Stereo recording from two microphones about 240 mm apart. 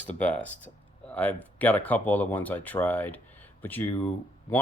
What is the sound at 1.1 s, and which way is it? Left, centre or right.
Speech, centre.